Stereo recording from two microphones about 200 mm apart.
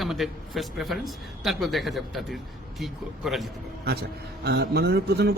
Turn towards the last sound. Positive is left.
turn(degrees=-50)  # may be behind; listen again after turning